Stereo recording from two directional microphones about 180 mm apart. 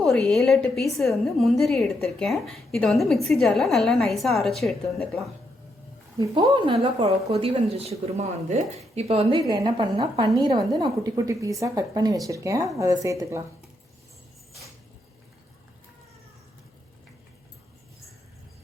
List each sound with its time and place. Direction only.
0.0 s a woman's voice: 5° left (ahead or behind)
6.1 s a woman's voice: 25° right (ahead or behind)
9.5 s a woman's voice: 25° right (ahead or behind)